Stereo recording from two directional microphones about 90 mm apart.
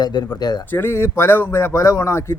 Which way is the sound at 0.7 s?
25° left (ahead or behind).